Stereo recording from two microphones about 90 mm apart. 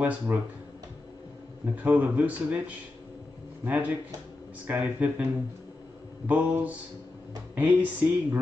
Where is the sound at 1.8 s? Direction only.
20° right (ahead or behind).